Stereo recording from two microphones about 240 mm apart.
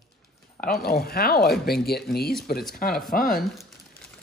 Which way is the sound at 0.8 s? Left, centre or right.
Left.